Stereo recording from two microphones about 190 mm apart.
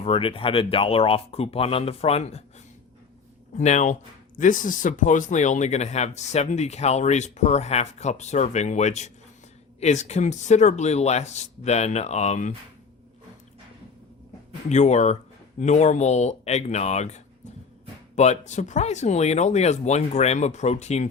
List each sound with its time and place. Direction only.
0.0 s speech: 30° left (ahead or behind)
3.6 s speech: 40° left (ahead or behind)
14.7 s speech: 35° left (ahead or behind)
18.2 s speech: 35° left (ahead or behind)